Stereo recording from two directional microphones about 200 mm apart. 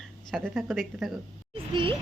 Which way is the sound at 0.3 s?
Centre (ahead or behind).